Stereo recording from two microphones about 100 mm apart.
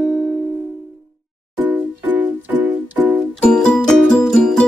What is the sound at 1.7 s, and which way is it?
Music, 15° right (ahead or behind).